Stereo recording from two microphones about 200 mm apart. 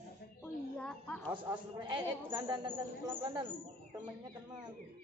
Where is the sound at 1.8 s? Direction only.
20° right (ahead or behind).